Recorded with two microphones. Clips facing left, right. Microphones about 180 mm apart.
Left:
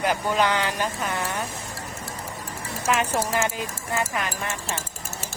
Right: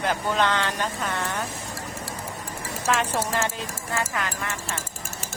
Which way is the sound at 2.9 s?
10° left (ahead or behind).